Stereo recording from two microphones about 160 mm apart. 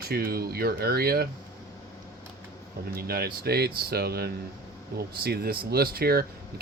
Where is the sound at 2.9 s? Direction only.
70° right (ahead or behind).